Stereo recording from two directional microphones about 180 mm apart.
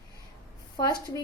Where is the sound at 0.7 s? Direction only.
25° left (ahead or behind).